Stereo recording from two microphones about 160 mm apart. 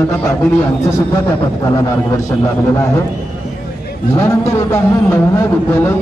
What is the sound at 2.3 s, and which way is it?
Speech, 15° left (ahead or behind).